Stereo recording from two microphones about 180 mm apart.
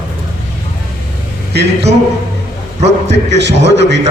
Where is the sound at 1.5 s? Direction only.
70° right (ahead or behind).